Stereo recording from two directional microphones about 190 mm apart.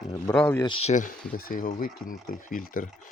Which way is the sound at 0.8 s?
40° left (ahead or behind).